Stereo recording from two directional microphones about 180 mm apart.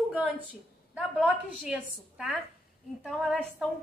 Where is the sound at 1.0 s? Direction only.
Centre (ahead or behind).